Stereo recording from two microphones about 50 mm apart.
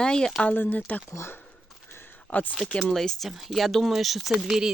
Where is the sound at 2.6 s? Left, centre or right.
Centre.